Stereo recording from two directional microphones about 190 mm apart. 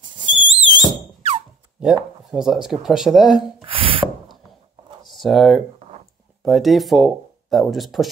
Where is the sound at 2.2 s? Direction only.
Centre (ahead or behind).